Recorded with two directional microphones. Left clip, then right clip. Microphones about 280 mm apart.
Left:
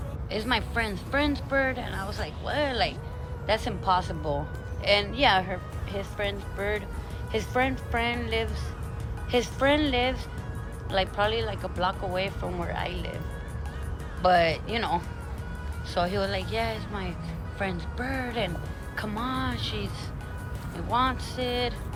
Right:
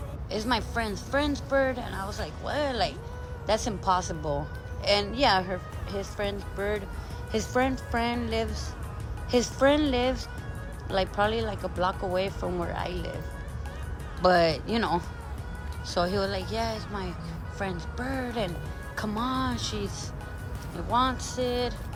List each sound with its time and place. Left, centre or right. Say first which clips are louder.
0.3 s speech: left 1 dB; centre
14.2 s speech: even; right
20.9 s speech: even; centre